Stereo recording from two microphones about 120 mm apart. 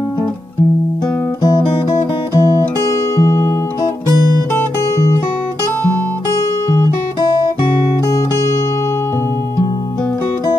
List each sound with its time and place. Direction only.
2.3 s music: 25° left (ahead or behind)
4.6 s music: 25° left (ahead or behind)